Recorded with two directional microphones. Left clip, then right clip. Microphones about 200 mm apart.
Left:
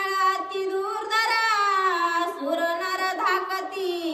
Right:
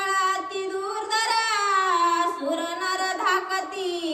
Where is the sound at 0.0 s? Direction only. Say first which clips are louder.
Even; 15° left (ahead or behind).